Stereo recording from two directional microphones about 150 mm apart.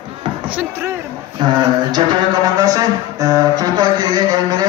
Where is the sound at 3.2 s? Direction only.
25° right (ahead or behind).